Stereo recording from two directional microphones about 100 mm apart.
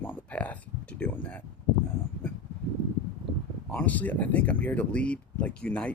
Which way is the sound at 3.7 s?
15° left (ahead or behind).